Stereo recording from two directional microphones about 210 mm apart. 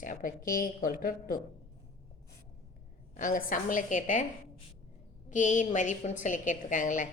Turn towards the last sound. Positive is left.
turn(degrees=40)  # may be behind; listen again after turning